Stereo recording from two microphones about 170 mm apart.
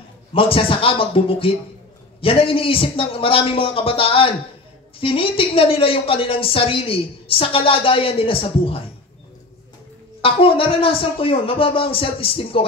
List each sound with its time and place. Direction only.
0.3 s speech: 35° left (ahead or behind)
10.2 s speech: 30° left (ahead or behind)